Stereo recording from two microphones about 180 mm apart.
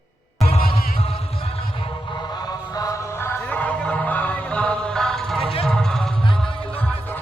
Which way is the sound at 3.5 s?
5° left (ahead or behind).